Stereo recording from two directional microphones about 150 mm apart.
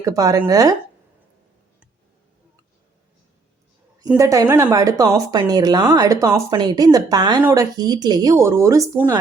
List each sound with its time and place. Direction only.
0.0 s speech: 25° right (ahead or behind)
4.2 s speech: 20° right (ahead or behind)